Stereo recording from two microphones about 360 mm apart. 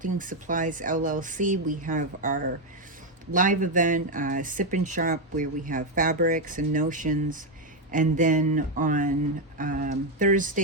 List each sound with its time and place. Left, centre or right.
0.0 s speech: right